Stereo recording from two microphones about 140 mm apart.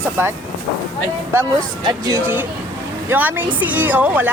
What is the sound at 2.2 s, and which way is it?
Speech, 15° right (ahead or behind).